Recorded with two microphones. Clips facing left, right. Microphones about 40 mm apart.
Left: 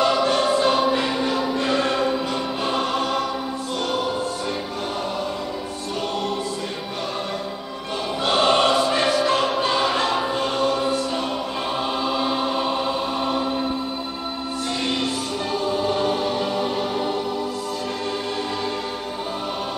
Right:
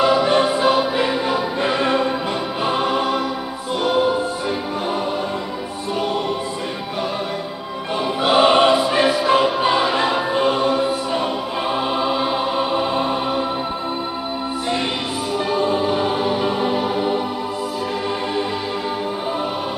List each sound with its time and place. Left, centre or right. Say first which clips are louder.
0.0 s music: right 3 dB; centre
7.9 s music: right 5 dB; centre
12.9 s music: right 5 dB; right
15.6 s music: right 1 dB; right